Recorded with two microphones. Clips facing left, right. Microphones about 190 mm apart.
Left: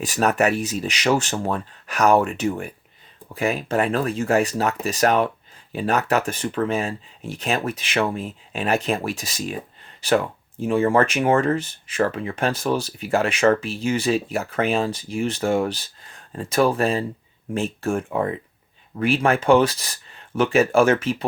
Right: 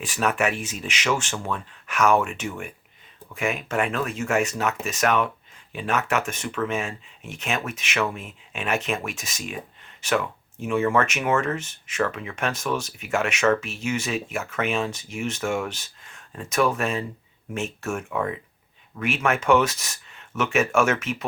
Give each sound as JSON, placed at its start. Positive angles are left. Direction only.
{"t": 0.0, "sound": "speech", "side_deg": 40}